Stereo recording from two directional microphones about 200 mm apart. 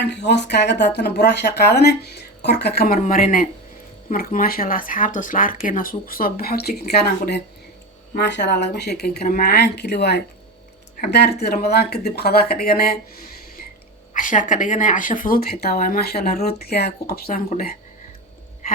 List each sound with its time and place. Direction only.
0.0 s speech: 60° left (ahead or behind)